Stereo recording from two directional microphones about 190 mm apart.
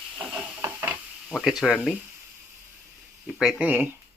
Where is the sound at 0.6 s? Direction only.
10° right (ahead or behind).